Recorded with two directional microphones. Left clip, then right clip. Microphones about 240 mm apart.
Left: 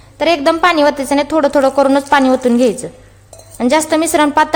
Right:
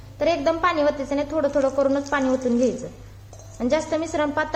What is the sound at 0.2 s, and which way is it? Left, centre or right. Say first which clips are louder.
A woman's voice: left 9 dB; left.